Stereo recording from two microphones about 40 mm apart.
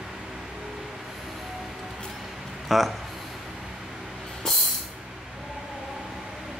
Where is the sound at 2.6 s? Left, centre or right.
Centre.